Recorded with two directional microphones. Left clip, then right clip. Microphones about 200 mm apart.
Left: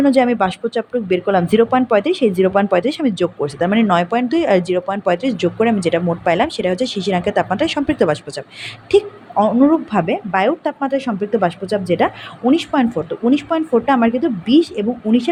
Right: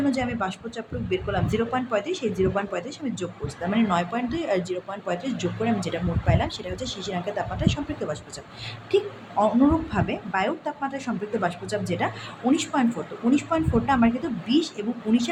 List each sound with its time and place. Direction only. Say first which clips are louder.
0.0 s a woman's voice: left 12 dB; 40° left (ahead or behind)